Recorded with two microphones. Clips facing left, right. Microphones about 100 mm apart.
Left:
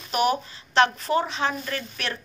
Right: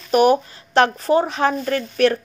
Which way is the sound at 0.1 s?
45° right (ahead or behind).